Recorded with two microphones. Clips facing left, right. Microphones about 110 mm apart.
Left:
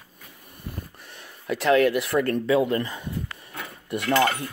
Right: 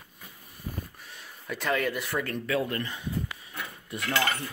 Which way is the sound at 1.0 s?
60° left (ahead or behind).